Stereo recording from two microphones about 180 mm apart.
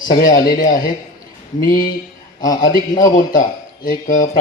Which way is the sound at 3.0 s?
45° left (ahead or behind).